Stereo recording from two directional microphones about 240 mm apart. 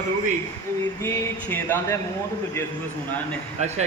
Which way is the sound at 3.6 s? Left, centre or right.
Right.